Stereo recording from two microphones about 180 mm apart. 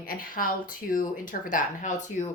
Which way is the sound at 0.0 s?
55° left (ahead or behind).